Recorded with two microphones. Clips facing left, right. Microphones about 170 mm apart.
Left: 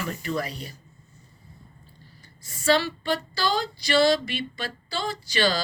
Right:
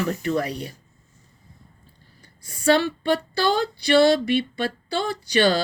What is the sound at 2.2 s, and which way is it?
A woman's voice, 60° right (ahead or behind).